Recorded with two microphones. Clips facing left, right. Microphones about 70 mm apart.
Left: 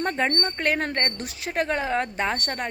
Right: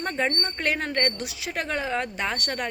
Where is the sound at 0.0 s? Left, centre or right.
Left.